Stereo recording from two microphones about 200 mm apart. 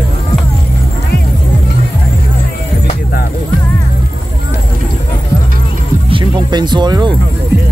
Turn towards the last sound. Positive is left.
turn(degrees=-20)  # may be behind; listen again after turning